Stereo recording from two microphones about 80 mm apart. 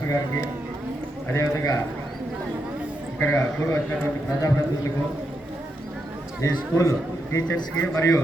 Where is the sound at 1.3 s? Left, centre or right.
Left.